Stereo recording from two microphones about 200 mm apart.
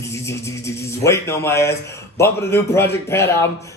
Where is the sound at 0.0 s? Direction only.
15° left (ahead or behind).